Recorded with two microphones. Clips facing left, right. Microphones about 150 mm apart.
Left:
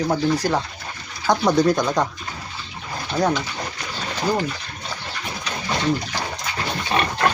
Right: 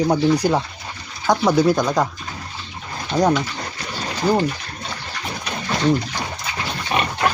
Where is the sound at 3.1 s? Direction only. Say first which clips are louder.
Right 3 dB; 20° right (ahead or behind).